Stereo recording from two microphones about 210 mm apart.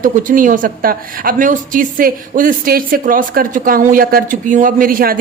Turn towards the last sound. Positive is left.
turn(degrees=-45)  # may be behind; listen again after turning